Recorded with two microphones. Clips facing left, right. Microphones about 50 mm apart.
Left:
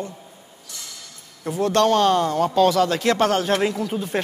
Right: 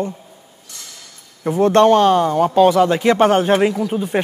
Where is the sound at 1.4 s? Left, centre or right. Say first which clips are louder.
Right 7 dB; right; by 4.2 s centre.